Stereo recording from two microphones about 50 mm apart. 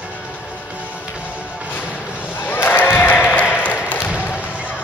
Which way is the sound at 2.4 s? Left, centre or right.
Left.